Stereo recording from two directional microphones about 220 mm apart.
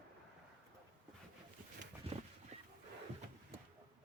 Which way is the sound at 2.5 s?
30° right (ahead or behind).